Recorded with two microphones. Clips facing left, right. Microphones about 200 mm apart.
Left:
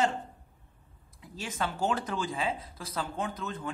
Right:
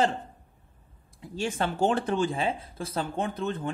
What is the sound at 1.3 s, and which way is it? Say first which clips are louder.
A man's voice: right 6 dB; 30° right (ahead or behind).